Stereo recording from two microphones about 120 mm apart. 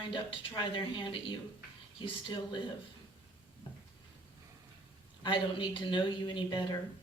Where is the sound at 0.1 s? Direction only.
40° left (ahead or behind).